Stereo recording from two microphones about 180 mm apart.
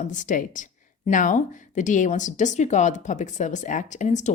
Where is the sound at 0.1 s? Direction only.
45° left (ahead or behind).